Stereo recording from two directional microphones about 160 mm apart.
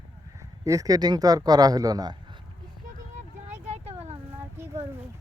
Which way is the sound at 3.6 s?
40° right (ahead or behind).